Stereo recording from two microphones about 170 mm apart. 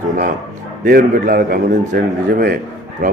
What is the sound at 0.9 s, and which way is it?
A man's voice, 60° right (ahead or behind).